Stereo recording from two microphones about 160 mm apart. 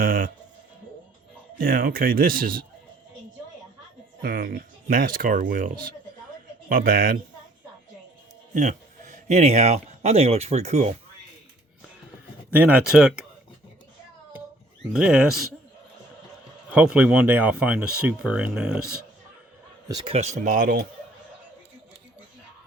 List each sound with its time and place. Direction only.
0.0 s music: 60° right (ahead or behind)
1.5 s speech: 65° right (ahead or behind)
4.2 s speech: 70° right (ahead or behind)
8.5 s speech: 50° right (ahead or behind)
12.5 s speech: 10° right (ahead or behind)
14.9 s speech: 5° right (ahead or behind)
16.7 s speech: 5° right (ahead or behind)
19.9 s speech: 25° right (ahead or behind)
20.1 s speech: 45° right (ahead or behind)